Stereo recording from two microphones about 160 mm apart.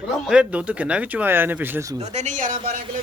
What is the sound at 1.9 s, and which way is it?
Speech, 45° right (ahead or behind).